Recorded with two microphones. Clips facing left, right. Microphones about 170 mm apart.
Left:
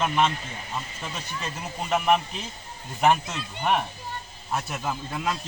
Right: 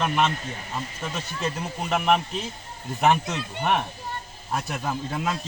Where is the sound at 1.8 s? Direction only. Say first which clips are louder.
Even; centre (ahead or behind).